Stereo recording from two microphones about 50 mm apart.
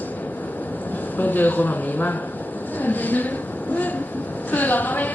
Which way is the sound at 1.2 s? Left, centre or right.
Left.